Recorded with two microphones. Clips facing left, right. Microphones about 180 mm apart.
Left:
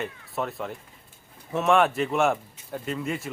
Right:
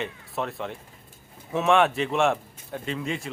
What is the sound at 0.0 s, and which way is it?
Speech, centre (ahead or behind).